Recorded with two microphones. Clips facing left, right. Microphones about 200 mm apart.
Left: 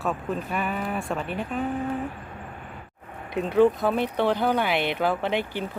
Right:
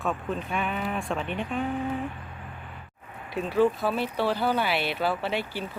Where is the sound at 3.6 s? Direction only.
20° left (ahead or behind).